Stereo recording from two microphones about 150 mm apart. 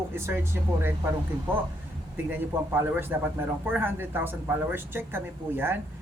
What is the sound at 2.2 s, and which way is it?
A man's voice, 15° right (ahead or behind).